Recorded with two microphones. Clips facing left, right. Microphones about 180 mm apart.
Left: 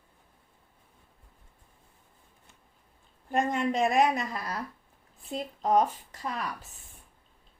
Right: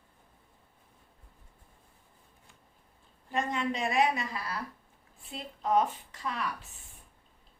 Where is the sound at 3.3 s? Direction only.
50° left (ahead or behind).